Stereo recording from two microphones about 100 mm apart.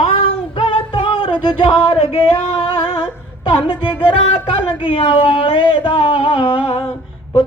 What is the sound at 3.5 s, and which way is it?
A woman's voice, 55° left (ahead or behind).